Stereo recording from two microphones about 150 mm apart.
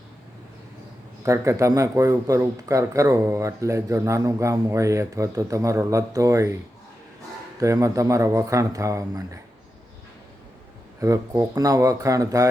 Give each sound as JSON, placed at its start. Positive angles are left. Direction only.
{"t": 1.2, "sound": "speech", "side_deg": -20}
{"t": 7.6, "sound": "speech", "side_deg": -20}
{"t": 11.0, "sound": "speech", "side_deg": -20}